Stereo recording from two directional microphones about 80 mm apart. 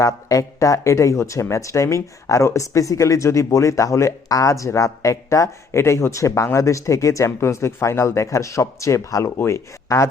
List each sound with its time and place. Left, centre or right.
0.0 s speech: left